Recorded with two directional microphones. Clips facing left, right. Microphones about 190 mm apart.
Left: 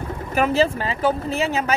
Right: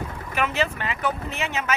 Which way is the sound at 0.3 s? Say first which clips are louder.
Left 7 dB; 35° left (ahead or behind).